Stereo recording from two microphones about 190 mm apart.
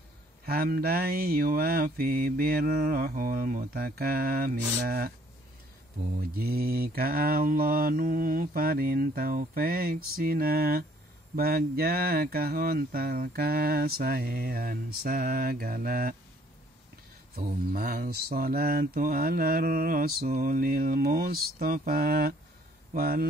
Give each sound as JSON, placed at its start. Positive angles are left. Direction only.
{"t": 0.5, "sound": "mantra", "side_deg": -50}
{"t": 6.3, "sound": "mantra", "side_deg": -50}
{"t": 17.4, "sound": "mantra", "side_deg": -45}